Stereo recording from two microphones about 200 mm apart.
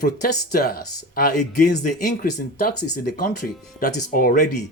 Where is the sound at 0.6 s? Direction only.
50° left (ahead or behind).